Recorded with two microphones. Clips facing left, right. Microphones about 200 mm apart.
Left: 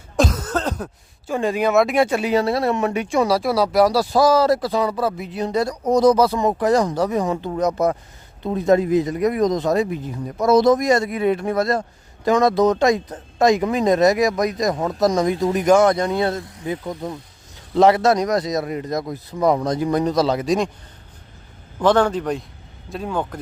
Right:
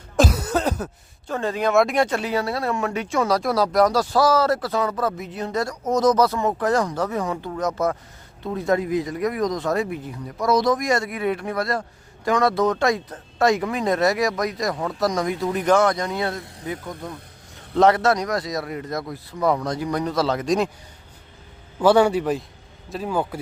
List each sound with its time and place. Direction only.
0.2 s a sound: 10° right (ahead or behind)
1.3 s speech: 10° left (ahead or behind)
2.4 s a man's voice: 25° left (ahead or behind)
15.9 s a man's voice: 30° left (ahead or behind); by 20.7 s 5° left (ahead or behind)
21.8 s a man's voice: 10° right (ahead or behind)